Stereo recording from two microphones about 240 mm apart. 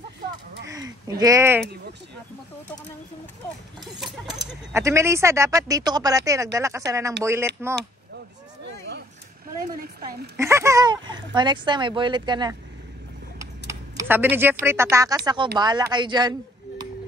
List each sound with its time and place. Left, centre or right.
1.0 s speech: centre
3.8 s speech: centre
4.8 s speech: centre
9.7 s a woman's voice: right
10.3 s speech: centre